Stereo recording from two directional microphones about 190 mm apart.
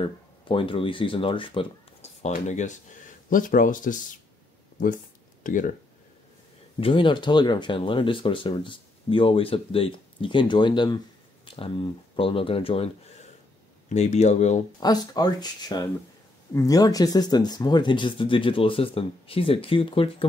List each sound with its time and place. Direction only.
0.0 s speech: 25° left (ahead or behind); by 4.0 s 45° left (ahead or behind)
4.7 s a sound: 45° left (ahead or behind)
6.8 s speech: 25° left (ahead or behind)
14.8 s speech: 20° left (ahead or behind)